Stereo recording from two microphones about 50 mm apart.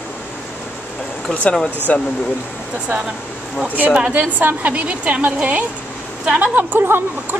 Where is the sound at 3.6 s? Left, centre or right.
Right.